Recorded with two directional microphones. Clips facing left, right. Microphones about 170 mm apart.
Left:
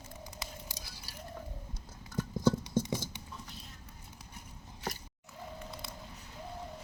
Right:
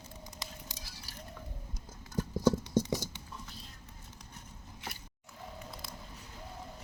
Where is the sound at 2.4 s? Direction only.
20° right (ahead or behind).